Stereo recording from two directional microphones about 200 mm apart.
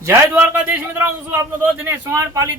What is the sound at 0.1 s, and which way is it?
Speech, 10° right (ahead or behind).